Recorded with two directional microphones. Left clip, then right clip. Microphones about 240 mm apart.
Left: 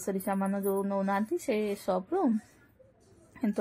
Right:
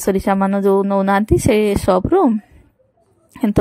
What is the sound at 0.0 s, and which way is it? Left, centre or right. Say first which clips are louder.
Speech: right 16 dB; right.